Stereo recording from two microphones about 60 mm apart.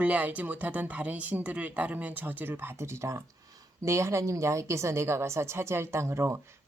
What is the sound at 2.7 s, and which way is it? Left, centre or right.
A woman's voice, right.